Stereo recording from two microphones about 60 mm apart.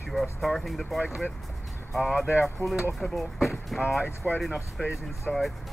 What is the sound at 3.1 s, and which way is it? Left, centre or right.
Speech, centre.